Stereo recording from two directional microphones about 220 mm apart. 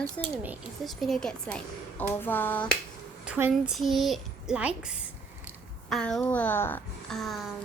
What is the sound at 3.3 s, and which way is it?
A woman's voice, 5° right (ahead or behind).